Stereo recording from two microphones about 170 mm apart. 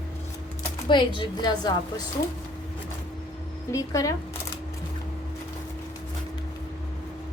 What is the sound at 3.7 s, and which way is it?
Speech, 20° left (ahead or behind).